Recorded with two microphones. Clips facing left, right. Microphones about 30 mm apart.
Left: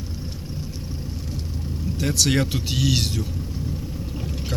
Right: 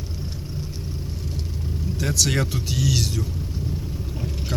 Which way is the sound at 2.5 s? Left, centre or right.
Left.